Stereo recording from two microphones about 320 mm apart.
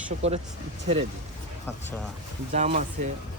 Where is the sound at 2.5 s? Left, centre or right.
Right.